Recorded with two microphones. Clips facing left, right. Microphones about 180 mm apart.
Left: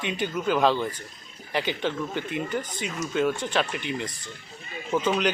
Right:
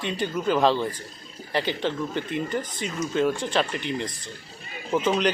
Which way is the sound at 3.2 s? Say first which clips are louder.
Right 1 dB; 15° right (ahead or behind).